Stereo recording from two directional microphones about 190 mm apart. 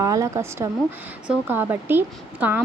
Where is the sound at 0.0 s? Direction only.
15° right (ahead or behind).